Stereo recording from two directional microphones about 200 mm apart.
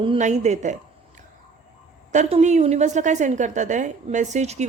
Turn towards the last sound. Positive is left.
turn(degrees=-35)  # may be behind; listen again after turning